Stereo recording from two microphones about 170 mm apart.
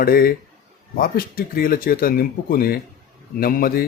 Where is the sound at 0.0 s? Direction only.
60° left (ahead or behind).